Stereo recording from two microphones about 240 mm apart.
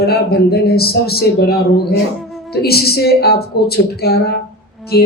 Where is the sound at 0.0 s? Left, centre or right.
Left.